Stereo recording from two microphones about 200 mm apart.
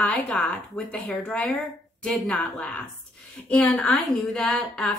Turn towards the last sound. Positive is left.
turn(degrees=0)  # may be behind; listen again after turning